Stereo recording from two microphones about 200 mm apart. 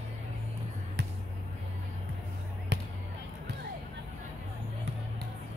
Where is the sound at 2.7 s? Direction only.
60° right (ahead or behind).